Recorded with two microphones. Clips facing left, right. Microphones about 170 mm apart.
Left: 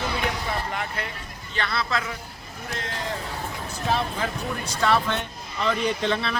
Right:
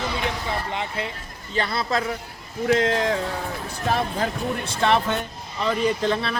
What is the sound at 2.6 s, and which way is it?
Speech, 90° right.